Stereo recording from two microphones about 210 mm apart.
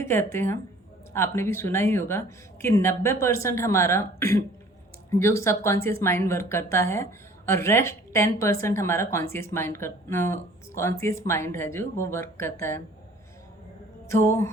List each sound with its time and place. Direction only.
0.0 s speech: 10° left (ahead or behind)
14.1 s speech: 10° left (ahead or behind)